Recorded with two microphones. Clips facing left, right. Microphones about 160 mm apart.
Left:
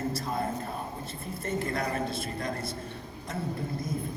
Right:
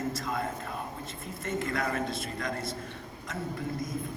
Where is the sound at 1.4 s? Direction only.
30° left (ahead or behind).